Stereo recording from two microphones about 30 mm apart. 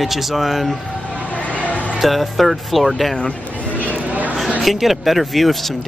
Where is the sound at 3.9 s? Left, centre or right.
Right.